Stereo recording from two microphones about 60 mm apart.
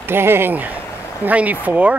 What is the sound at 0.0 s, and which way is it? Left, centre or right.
Speech, right.